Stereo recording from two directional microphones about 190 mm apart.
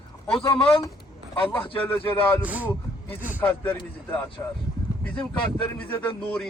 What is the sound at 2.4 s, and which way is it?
Speech, 10° right (ahead or behind).